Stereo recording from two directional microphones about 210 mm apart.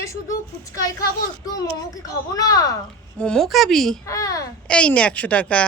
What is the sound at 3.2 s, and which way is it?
Speech, 5° left (ahead or behind).